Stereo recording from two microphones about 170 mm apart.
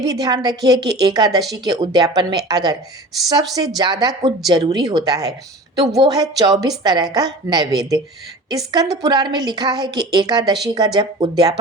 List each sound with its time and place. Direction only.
0.0 s a woman's voice: 20° right (ahead or behind)